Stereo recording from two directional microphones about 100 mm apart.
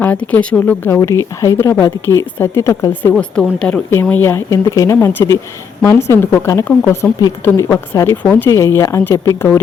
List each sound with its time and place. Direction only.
0.0 s speech: 15° left (ahead or behind)
0.9 s speech: 30° left (ahead or behind)
3.0 s speech: 20° left (ahead or behind)
4.1 s speech: 25° left (ahead or behind)
8.2 s speech: 15° left (ahead or behind)
8.4 s speech: 30° left (ahead or behind)